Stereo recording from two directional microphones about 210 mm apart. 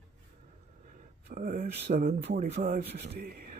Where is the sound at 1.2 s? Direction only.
40° right (ahead or behind).